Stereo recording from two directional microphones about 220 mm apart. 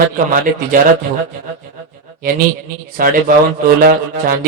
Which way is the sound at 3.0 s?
40° right (ahead or behind).